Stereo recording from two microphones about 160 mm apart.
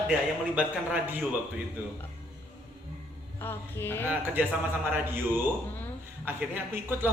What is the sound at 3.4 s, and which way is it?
Mantra, 15° left (ahead or behind).